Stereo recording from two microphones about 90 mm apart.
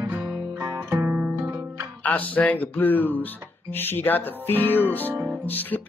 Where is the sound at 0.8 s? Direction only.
20° right (ahead or behind).